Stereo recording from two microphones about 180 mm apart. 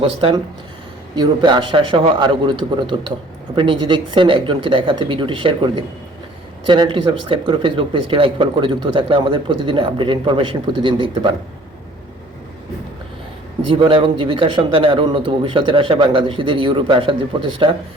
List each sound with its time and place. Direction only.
0.0 s speech: 30° right (ahead or behind)
13.7 s speech: 30° right (ahead or behind)